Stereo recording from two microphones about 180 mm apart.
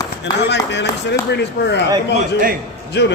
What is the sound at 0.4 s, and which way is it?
A man's voice, 75° left (ahead or behind).